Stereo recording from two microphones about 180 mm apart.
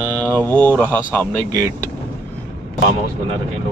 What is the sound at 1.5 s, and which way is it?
Speech, 20° right (ahead or behind).